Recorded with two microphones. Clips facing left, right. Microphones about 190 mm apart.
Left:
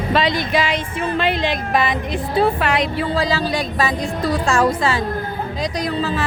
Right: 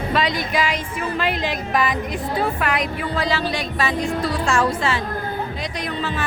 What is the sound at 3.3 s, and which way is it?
Speech, 40° left (ahead or behind).